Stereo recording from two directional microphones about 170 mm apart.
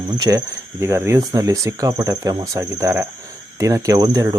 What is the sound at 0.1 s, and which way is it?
Speech, 20° right (ahead or behind).